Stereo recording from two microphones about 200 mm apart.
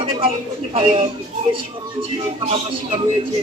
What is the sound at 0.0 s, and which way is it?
Speech, 25° right (ahead or behind).